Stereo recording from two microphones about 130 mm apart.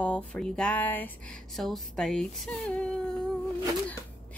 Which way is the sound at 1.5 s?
Centre (ahead or behind).